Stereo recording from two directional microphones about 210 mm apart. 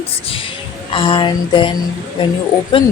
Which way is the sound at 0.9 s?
25° left (ahead or behind).